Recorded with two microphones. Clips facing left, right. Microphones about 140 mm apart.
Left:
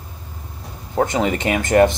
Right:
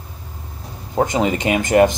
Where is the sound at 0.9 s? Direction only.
15° right (ahead or behind).